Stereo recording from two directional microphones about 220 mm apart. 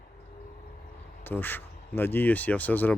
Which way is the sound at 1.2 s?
10° left (ahead or behind).